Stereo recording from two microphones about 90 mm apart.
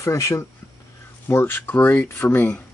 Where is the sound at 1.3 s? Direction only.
25° left (ahead or behind).